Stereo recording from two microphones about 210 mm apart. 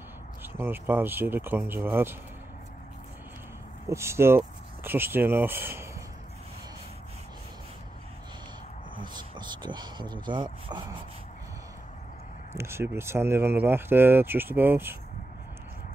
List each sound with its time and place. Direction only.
0.4 s speech: 10° right (ahead or behind)
3.9 s speech: 10° right (ahead or behind)
9.1 s speech: 20° right (ahead or behind)
12.5 s speech: 10° right (ahead or behind)